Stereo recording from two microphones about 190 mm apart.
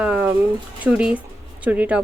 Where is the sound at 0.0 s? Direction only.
5° right (ahead or behind).